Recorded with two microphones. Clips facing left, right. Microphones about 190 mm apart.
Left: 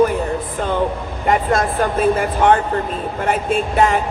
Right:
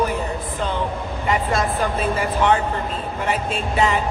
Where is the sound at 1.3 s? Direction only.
50° left (ahead or behind).